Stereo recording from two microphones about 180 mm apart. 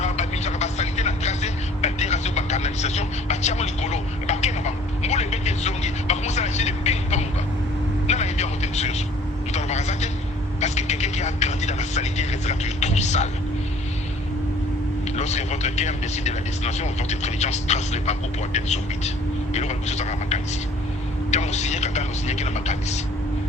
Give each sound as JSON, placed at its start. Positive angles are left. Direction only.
{"t": 0.0, "sound": "vehicle", "side_deg": 40}
{"t": 15.1, "sound": "vehicle", "side_deg": 40}
{"t": 19.5, "sound": "a sound", "side_deg": 40}